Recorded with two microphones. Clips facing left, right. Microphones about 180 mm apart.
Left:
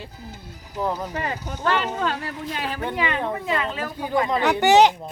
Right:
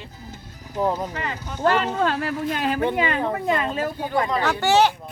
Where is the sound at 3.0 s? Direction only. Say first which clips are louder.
Right 2 dB; 45° right (ahead or behind).